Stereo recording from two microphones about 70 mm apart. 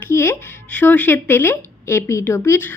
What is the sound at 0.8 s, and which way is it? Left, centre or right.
Speech, left.